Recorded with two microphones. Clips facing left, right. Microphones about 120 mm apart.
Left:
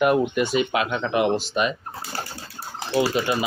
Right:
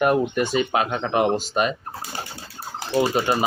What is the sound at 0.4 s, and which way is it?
Speech, 40° right (ahead or behind).